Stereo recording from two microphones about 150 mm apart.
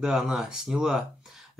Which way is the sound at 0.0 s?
5° right (ahead or behind).